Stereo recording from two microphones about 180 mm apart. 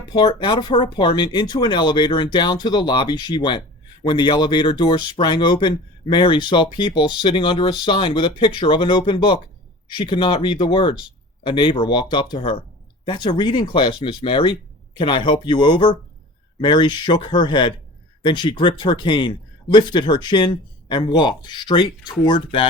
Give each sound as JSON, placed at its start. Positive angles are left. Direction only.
{"t": 0.1, "sound": "speech", "side_deg": 25}